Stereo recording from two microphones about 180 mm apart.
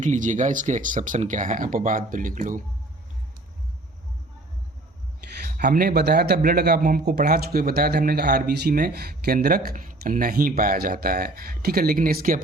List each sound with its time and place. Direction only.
0.0 s speech: 45° right (ahead or behind)
5.5 s speech: 50° right (ahead or behind)